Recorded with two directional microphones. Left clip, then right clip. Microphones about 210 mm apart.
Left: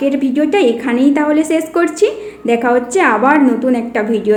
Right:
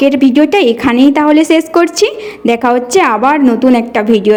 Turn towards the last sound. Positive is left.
turn(degrees=-40)  # may be behind; listen again after turning